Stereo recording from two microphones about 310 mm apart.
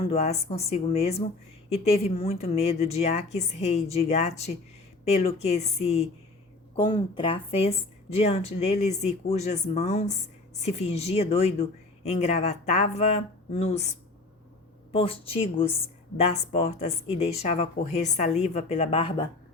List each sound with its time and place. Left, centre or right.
0.1 s speech: left
14.9 s speech: centre